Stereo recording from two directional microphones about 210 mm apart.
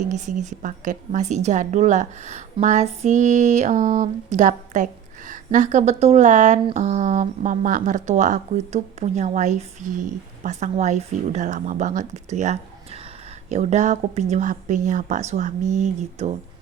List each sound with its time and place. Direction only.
0.1 s a woman's voice: 35° right (ahead or behind)